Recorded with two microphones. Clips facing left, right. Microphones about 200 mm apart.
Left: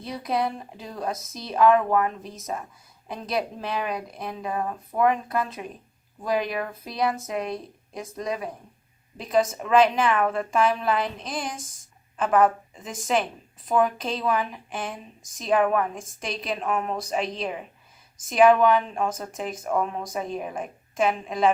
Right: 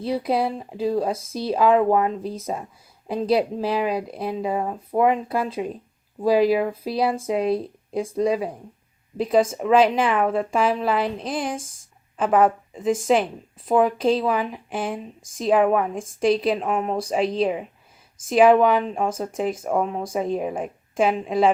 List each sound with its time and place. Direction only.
0.0 s a woman's voice: 30° right (ahead or behind)